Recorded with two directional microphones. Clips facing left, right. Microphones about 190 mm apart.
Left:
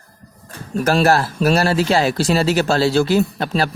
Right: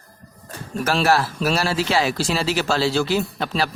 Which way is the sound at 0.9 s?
45° left (ahead or behind).